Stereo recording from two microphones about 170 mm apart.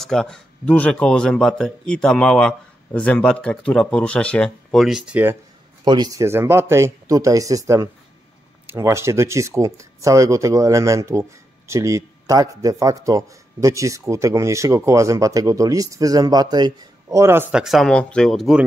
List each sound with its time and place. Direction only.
0.0 s a man's voice: centre (ahead or behind)
5.9 s speech: 25° right (ahead or behind); by 18.6 s centre (ahead or behind)